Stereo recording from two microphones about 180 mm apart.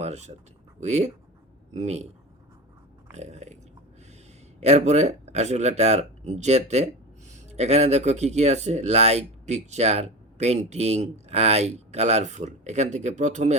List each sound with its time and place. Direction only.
0.0 s speech: 40° right (ahead or behind)
3.1 s biting: 40° right (ahead or behind)
4.6 s speech: 40° right (ahead or behind)